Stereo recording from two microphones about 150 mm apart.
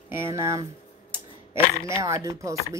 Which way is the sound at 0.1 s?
15° right (ahead or behind).